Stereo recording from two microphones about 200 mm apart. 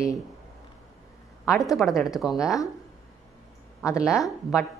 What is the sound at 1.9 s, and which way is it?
Speech, centre (ahead or behind).